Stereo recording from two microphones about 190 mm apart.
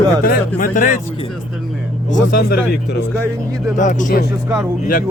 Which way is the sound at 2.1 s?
55° left (ahead or behind).